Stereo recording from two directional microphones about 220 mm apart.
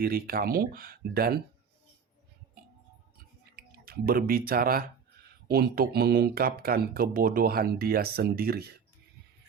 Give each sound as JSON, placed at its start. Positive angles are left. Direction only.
{"t": 0.0, "sound": "speech", "side_deg": -40}
{"t": 3.5, "sound": "speech", "side_deg": -45}